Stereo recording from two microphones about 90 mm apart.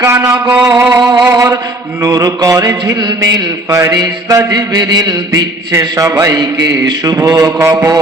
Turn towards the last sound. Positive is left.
turn(degrees=-35)  # may be behind; listen again after turning